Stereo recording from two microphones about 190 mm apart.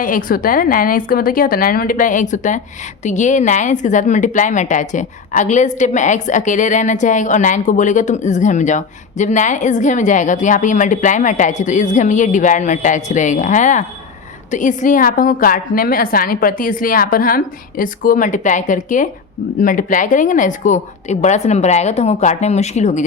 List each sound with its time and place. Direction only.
0.0 s a woman's voice: 45° left (ahead or behind)